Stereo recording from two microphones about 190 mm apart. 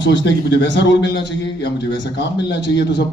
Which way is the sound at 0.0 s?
70° left (ahead or behind).